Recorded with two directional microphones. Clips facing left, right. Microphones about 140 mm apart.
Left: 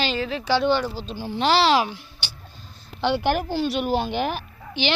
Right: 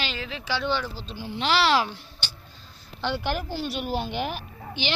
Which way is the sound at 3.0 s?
65° left (ahead or behind).